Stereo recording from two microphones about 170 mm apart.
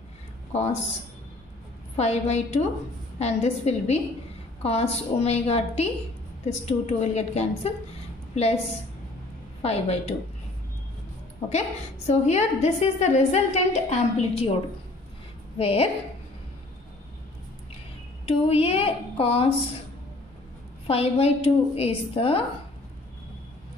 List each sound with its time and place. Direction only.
0.5 s a man's voice: 40° left (ahead or behind)
2.0 s a woman's voice: 40° left (ahead or behind)
9.6 s a woman's voice: 40° left (ahead or behind)
12.1 s a woman's voice: 40° left (ahead or behind)
15.5 s a woman's voice: 35° left (ahead or behind)
18.2 s a woman's voice: 35° left (ahead or behind)
20.8 s a woman's voice: 35° left (ahead or behind)